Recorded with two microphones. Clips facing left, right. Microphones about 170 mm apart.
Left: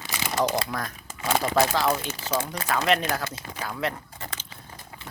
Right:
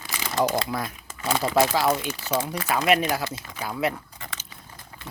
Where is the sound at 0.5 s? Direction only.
10° right (ahead or behind).